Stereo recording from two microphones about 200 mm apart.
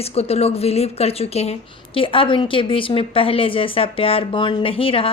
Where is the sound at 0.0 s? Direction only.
30° left (ahead or behind).